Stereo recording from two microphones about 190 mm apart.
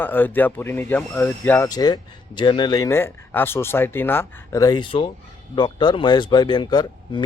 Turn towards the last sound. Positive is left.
turn(degrees=25)  # may be behind; listen again after turning